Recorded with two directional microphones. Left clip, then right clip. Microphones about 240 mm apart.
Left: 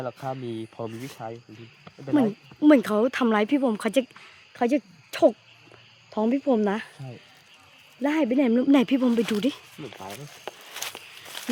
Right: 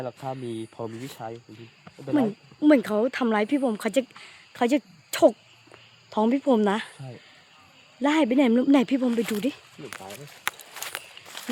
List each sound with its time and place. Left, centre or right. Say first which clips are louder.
0.0 s speech: left 1 dB; centre
10.8 s walk: left 2 dB; centre